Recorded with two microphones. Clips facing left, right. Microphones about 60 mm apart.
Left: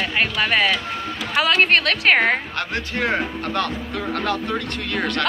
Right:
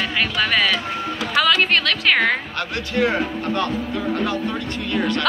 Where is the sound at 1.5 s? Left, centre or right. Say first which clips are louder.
Left 2 dB; left.